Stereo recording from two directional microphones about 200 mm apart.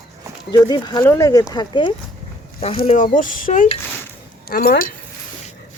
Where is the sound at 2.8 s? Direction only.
40° left (ahead or behind).